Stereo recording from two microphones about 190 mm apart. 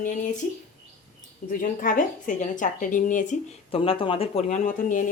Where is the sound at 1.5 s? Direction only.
45° left (ahead or behind).